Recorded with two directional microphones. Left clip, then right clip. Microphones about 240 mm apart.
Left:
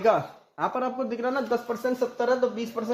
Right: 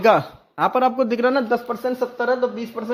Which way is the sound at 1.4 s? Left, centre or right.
Right.